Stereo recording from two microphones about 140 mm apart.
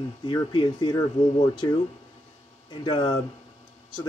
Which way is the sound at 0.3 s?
35° left (ahead or behind).